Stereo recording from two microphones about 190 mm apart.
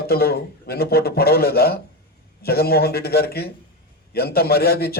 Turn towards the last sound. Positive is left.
turn(degrees=55)  # may be behind; listen again after turning